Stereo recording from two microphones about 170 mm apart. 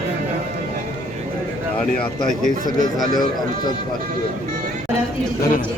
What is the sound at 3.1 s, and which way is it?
Speech, 25° left (ahead or behind).